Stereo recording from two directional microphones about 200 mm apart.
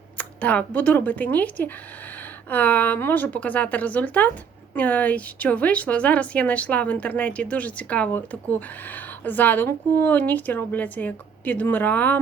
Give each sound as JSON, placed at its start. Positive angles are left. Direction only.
{"t": 0.2, "sound": "a woman's voice", "side_deg": 5}